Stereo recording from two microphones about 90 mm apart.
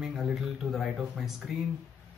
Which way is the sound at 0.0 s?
Centre (ahead or behind).